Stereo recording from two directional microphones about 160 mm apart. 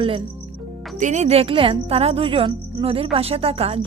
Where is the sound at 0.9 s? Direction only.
50° right (ahead or behind).